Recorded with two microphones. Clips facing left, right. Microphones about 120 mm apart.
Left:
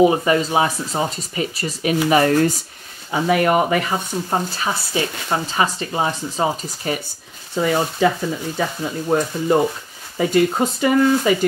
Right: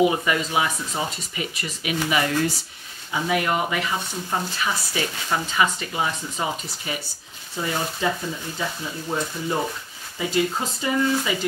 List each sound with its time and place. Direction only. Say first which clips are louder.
0.0 s speech: left 6 dB; 35° left (ahead or behind)
7.5 s speech: left 8 dB; 70° left (ahead or behind)
8.5 s speech: left 6 dB; 60° left (ahead or behind)